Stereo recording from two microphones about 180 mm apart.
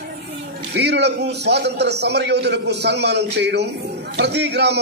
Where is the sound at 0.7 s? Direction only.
70° right (ahead or behind).